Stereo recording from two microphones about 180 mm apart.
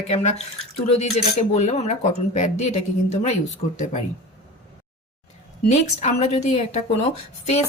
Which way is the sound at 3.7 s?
40° left (ahead or behind).